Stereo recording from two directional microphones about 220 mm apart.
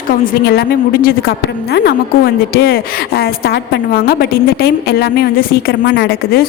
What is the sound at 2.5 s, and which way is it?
A woman's voice, 45° left (ahead or behind).